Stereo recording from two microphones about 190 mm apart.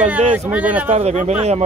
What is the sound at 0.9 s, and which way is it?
Speech, 35° right (ahead or behind).